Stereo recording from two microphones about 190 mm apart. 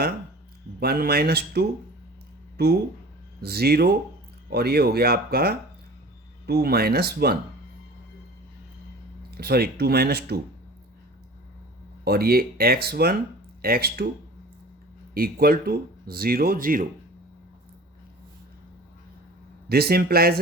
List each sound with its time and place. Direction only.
0.8 s speech: 55° right (ahead or behind)
3.4 s speech: 55° right (ahead or behind)
9.4 s speech: 55° right (ahead or behind)
12.0 s speech: 55° right (ahead or behind)
15.1 s speech: 50° right (ahead or behind)
19.6 s speech: 55° right (ahead or behind)